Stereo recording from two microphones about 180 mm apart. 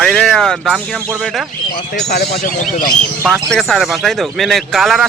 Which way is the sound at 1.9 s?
60° left (ahead or behind).